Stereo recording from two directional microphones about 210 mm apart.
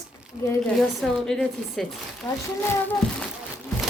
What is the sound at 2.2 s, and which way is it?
Speech, 15° left (ahead or behind).